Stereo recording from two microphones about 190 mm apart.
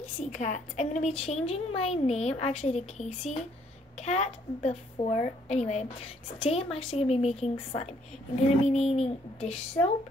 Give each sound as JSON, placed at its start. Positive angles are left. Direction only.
{"t": 0.2, "sound": "a woman's voice", "side_deg": 40}